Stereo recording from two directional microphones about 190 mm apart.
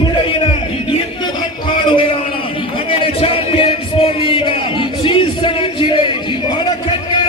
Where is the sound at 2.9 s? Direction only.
30° left (ahead or behind).